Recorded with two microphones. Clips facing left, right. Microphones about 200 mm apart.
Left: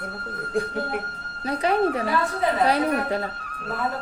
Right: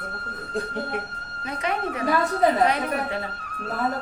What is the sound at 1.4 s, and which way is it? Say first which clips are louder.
A woman's voice: left 6 dB; 35° left (ahead or behind).